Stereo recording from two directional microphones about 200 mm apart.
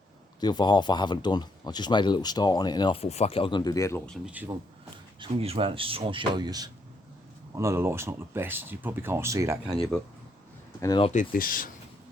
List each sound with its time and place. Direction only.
0.3 s speech: 20° left (ahead or behind)
4.3 s speech: 10° right (ahead or behind)
5.2 s speech: 30° right (ahead or behind)
10.8 s speech: 15° left (ahead or behind)
11.0 s speech: 40° left (ahead or behind)